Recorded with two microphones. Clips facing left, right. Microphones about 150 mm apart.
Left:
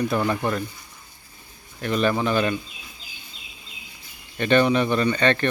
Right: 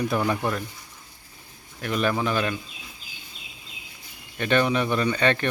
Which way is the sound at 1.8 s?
5° right (ahead or behind).